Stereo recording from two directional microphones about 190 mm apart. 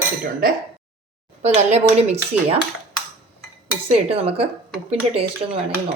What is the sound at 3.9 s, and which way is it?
Speech, 30° right (ahead or behind).